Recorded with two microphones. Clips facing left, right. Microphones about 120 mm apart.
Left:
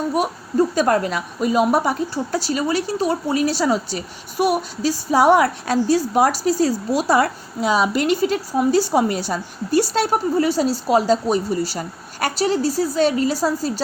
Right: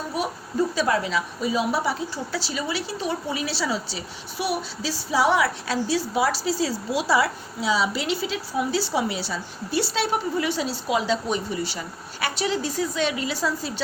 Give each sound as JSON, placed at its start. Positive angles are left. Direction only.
{"t": 0.2, "sound": "a woman's voice", "side_deg": 50}